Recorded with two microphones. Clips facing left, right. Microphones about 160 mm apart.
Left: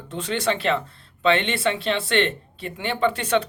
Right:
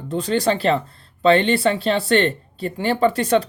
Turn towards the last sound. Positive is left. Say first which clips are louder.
# right 4 dB
turn(degrees=-35)  # may be behind; listen again after turning